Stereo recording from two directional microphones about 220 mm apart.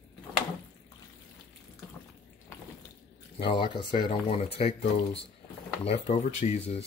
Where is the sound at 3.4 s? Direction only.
20° left (ahead or behind).